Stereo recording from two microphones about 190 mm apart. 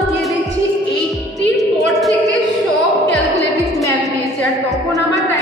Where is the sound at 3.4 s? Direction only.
15° left (ahead or behind).